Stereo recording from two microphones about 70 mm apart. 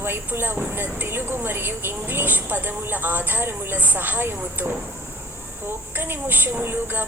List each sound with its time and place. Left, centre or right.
0.0 s a woman's voice: right
6.0 s speech: right